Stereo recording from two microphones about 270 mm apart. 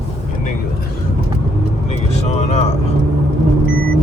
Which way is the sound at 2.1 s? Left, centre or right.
Left.